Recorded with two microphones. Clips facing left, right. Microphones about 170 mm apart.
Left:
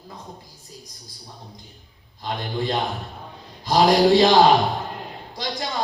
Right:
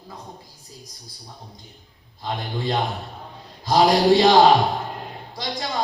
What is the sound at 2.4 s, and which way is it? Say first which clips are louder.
Speech: even; centre (ahead or behind).